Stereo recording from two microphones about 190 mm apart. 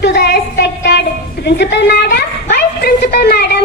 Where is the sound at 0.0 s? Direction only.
60° left (ahead or behind).